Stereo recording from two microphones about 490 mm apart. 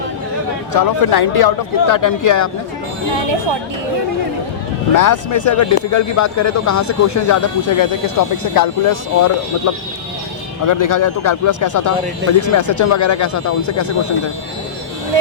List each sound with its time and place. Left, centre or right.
0.7 s speech: left
4.9 s speech: left
10.7 s speech: left